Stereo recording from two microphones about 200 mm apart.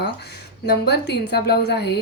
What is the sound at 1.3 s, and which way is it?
Speech, 55° left (ahead or behind).